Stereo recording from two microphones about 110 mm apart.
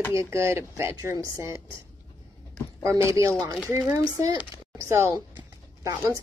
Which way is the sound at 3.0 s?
25° right (ahead or behind).